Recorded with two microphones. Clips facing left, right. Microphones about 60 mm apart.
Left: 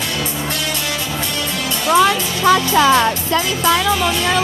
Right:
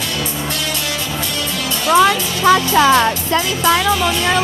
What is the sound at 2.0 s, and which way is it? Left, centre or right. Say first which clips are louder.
Music: right 1 dB; right.